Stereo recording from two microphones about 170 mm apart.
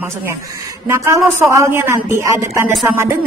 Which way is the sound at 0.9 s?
15° right (ahead or behind).